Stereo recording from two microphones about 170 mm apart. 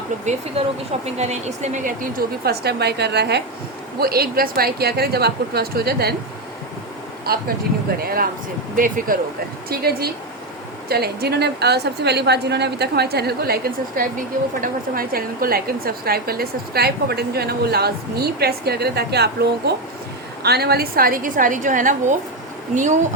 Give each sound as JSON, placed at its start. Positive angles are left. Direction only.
{"t": 0.6, "sound": "a woman's voice", "side_deg": -35}
{"t": 4.0, "sound": "speech", "side_deg": -65}
{"t": 7.3, "sound": "speech", "side_deg": -65}
{"t": 9.6, "sound": "a woman's voice", "side_deg": -65}